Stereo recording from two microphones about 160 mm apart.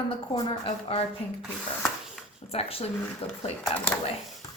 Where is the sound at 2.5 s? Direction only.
40° left (ahead or behind).